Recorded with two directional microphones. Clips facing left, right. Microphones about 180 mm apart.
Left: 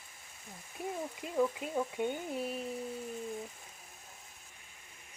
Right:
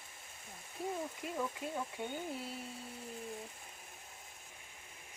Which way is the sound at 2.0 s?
20° left (ahead or behind).